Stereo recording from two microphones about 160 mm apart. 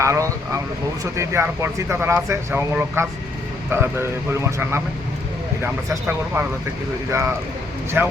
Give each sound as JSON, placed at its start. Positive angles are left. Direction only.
{"t": 0.0, "sound": "vehicle", "side_deg": -20}
{"t": 1.1, "sound": "speech", "side_deg": -20}